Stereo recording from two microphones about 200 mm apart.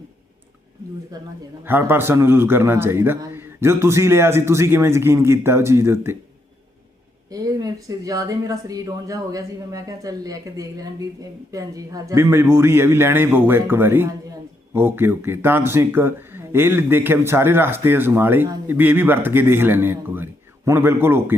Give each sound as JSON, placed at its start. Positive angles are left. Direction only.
{"t": 1.6, "sound": "speech", "side_deg": -10}
{"t": 7.3, "sound": "speech", "side_deg": -20}